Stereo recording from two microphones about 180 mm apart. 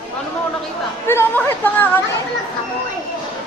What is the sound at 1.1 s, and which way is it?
Speech, 10° left (ahead or behind).